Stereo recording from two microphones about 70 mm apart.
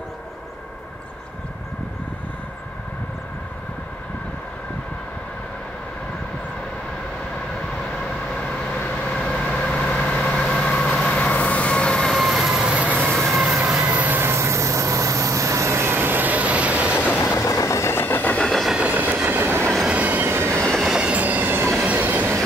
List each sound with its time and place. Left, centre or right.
8.4 s vehicle: centre
9.1 s vehicle: centre
12.7 s train: centre
13.0 s train: centre
13.8 s vehicle: right
17.2 s train: left
18.4 s train: centre
18.7 s train: centre; by 20.6 s right
20.8 s train: centre
21.1 s train: right